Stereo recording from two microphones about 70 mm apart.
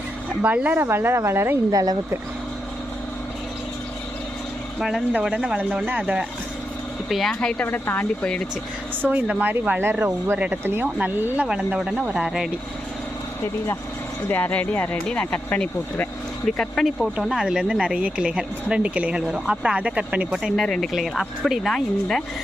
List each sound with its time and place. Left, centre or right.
0.4 s speech: right
0.8 s speech: right
1.7 s speech: right
4.8 s speech: centre
5.5 s speech: right
7.3 s speech: centre
7.7 s speech: left
9.0 s speech: right
11.4 s speech: centre
14.3 s speech: left
16.5 s speech: centre
17.4 s speech: centre
20.6 s speech: centre